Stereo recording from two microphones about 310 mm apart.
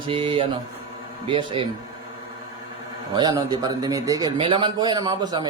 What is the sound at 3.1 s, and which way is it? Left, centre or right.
A man's voice, centre.